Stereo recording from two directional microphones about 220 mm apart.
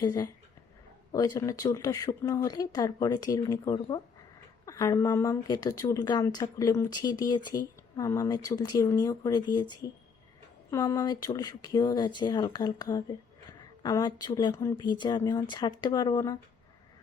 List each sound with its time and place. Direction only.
0.0 s speech: 15° left (ahead or behind)